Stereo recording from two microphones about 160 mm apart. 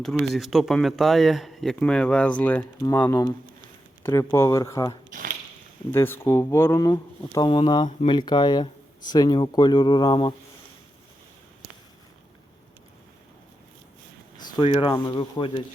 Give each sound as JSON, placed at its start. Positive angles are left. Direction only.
{"t": 0.3, "sound": "speech", "side_deg": 0}
{"t": 14.3, "sound": "a sound", "side_deg": 25}
{"t": 14.7, "sound": "speech", "side_deg": 35}